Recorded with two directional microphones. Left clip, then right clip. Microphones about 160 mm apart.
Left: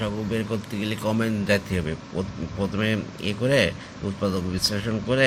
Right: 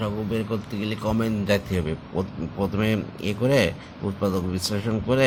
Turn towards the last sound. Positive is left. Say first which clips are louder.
# right 1 dB
turn(degrees=-20)  # may be behind; listen again after turning